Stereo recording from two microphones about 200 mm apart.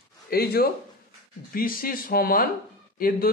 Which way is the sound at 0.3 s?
50° left (ahead or behind).